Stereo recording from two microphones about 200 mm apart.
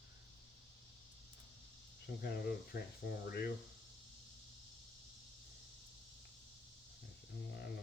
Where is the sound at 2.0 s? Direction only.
55° left (ahead or behind).